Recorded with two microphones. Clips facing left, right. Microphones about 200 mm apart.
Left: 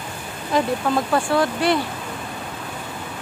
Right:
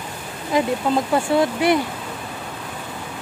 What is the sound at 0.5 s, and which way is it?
Speech, 15° right (ahead or behind).